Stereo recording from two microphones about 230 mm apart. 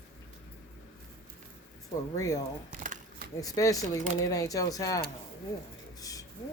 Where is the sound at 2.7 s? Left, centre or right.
Right.